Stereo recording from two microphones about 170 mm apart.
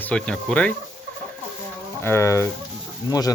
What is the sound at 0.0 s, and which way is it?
Speech, 5° left (ahead or behind).